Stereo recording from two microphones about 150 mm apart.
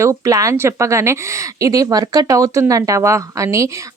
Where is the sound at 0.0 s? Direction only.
20° right (ahead or behind).